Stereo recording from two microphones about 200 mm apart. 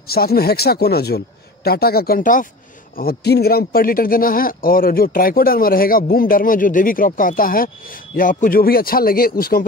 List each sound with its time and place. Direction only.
0.1 s speech: 50° left (ahead or behind)